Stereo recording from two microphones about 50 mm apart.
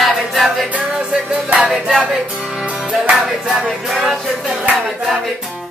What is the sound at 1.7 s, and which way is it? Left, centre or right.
Music, centre.